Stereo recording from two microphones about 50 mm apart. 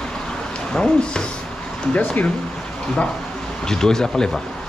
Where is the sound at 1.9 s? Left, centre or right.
Left.